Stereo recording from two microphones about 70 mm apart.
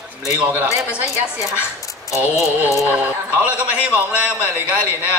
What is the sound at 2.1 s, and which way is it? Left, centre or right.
Mantra, left.